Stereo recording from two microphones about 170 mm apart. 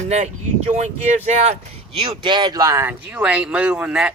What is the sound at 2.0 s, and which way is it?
Speech, 30° right (ahead or behind).